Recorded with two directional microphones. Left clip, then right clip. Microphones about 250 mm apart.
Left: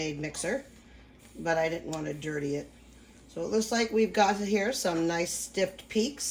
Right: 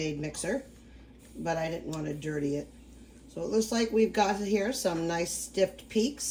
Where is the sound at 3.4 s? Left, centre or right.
Left.